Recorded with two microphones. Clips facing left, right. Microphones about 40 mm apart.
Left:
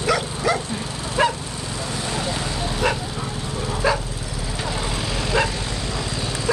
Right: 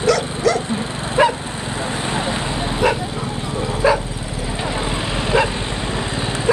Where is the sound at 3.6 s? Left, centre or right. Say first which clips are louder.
Right 5 dB; right.